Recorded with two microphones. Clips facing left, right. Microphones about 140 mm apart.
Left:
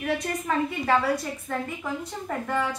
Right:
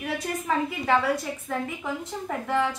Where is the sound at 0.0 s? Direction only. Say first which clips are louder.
Left 2 dB; 5° right (ahead or behind).